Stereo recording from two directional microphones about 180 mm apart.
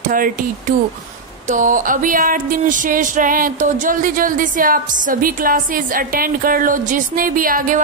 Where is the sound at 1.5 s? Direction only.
45° right (ahead or behind).